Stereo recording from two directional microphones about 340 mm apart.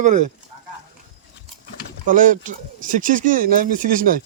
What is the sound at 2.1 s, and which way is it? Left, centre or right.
Speech, right.